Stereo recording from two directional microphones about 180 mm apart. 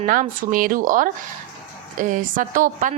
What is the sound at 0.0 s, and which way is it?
A woman's voice, 45° right (ahead or behind).